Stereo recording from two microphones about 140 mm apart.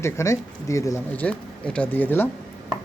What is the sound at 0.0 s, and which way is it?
Speech, 20° left (ahead or behind).